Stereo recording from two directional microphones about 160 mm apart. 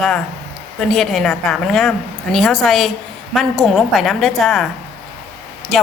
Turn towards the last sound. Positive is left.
turn(degrees=0)  # may be behind; listen again after turning